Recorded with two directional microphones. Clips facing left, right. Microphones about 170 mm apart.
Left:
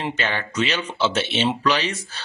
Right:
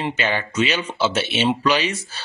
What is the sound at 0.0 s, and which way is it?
Speech, 5° right (ahead or behind).